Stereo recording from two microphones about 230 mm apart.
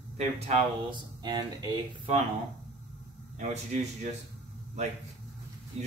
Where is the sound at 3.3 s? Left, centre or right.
Right.